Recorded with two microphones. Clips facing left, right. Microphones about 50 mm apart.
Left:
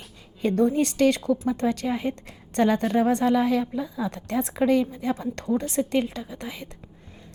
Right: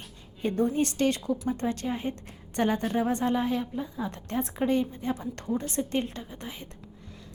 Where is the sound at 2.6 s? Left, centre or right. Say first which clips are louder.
Left 5 dB; left.